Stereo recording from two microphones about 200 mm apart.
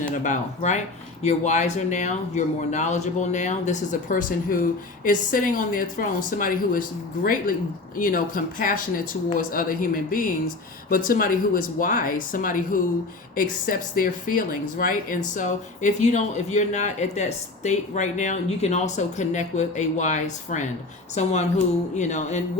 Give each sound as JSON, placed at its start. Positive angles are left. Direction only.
{"t": 0.1, "sound": "speech", "side_deg": 40}